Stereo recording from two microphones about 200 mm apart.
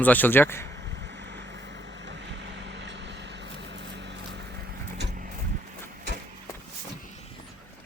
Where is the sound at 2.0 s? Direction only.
60° right (ahead or behind).